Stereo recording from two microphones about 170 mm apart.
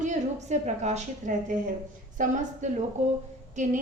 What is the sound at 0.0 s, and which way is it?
A woman's voice, 45° right (ahead or behind).